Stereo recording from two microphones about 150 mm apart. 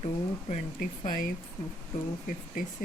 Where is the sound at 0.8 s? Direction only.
65° left (ahead or behind).